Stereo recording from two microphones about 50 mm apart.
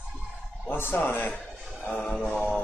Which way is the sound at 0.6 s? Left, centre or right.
Left.